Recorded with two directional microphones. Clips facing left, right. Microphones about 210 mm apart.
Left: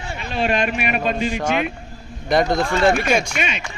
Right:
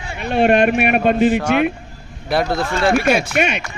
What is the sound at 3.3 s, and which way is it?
Speech, 55° right (ahead or behind).